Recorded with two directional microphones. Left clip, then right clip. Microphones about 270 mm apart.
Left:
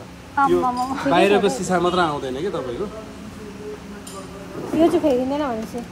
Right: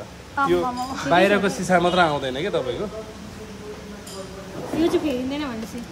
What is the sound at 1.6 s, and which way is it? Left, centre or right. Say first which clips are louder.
Speech: right 1 dB; right.